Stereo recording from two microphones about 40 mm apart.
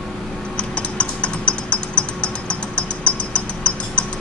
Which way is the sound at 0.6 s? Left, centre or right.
Left.